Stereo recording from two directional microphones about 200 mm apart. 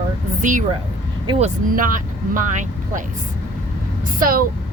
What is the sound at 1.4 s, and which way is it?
Speech, 40° right (ahead or behind).